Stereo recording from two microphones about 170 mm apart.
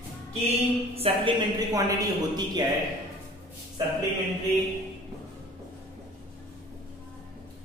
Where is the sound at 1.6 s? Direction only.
20° right (ahead or behind).